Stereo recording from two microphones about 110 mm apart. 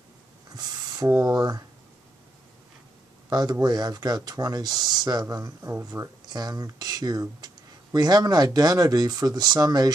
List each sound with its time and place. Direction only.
0.6 s speech: 30° right (ahead or behind)
3.3 s speech: 35° right (ahead or behind)
6.2 s speech: 40° right (ahead or behind)